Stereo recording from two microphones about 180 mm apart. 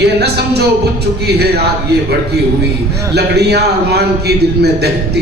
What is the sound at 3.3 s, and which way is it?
A man's voice, 65° right (ahead or behind).